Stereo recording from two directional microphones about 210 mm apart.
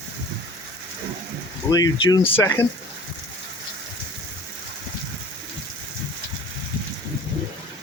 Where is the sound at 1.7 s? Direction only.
20° left (ahead or behind).